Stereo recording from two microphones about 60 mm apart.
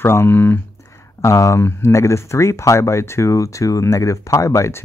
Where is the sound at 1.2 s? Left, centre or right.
Left.